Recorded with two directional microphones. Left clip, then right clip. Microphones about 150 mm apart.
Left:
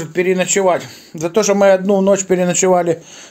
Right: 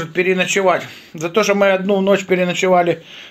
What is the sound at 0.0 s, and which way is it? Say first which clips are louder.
Speech: left 1 dB; 30° left (ahead or behind).